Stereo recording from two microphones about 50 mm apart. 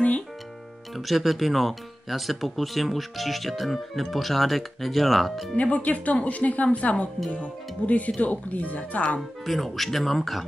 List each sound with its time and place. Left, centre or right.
0.9 s speech: centre
5.6 s speech: left
9.5 s speech: centre